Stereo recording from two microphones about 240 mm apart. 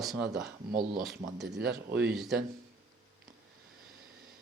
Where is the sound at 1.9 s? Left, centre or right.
Centre.